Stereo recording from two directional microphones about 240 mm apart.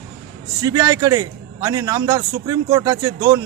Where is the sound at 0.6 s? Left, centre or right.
Centre.